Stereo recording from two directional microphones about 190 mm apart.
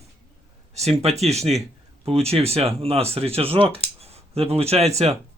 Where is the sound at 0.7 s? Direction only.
35° right (ahead or behind).